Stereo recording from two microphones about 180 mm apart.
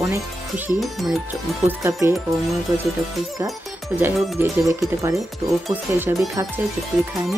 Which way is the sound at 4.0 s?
15° right (ahead or behind).